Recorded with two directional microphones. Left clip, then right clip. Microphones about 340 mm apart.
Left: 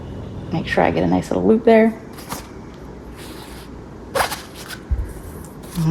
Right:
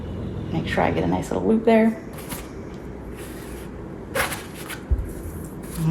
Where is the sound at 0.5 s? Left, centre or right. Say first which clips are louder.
Left 5 dB; left.